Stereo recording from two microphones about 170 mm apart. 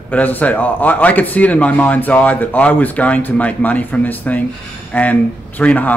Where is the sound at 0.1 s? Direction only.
10° left (ahead or behind).